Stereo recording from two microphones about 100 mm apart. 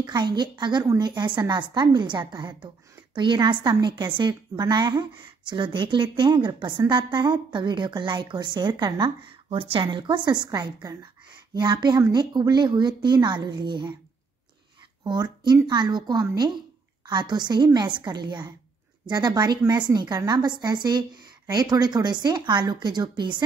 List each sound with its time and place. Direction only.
0.0 s a woman's voice: 45° right (ahead or behind)
9.5 s a woman's voice: 65° right (ahead or behind)
15.0 s a woman's voice: 45° right (ahead or behind)